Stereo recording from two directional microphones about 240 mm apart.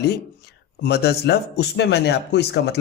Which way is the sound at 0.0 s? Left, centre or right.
Left.